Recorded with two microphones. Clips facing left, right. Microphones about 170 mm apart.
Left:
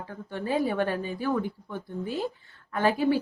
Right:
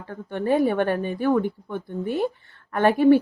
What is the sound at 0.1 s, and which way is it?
A woman's voice, 55° right (ahead or behind).